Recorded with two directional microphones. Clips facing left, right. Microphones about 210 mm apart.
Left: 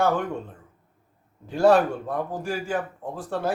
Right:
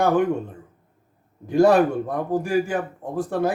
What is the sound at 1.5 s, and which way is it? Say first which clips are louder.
Speech: right 3 dB; 15° right (ahead or behind).